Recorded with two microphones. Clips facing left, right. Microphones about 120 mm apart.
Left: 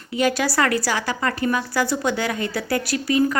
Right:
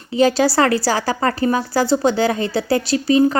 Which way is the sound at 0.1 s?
30° right (ahead or behind).